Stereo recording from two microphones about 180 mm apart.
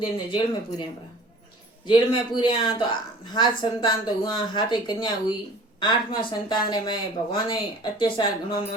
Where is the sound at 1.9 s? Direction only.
25° left (ahead or behind).